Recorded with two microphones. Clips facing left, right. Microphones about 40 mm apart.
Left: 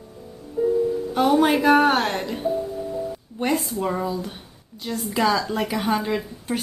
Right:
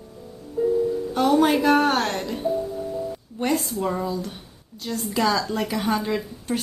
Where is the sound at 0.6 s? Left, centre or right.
Left.